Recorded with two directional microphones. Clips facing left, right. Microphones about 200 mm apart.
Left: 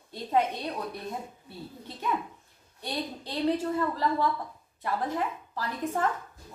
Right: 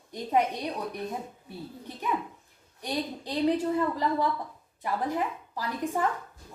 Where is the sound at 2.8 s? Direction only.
15° right (ahead or behind).